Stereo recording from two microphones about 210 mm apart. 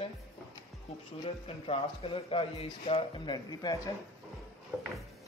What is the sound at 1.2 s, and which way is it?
Speech, 25° left (ahead or behind).